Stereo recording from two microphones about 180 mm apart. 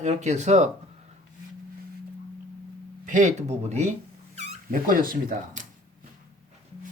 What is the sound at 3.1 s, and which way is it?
Speech, 45° right (ahead or behind).